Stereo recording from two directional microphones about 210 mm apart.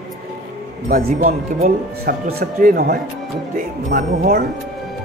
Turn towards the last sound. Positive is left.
turn(degrees=-50)  # may be behind; listen again after turning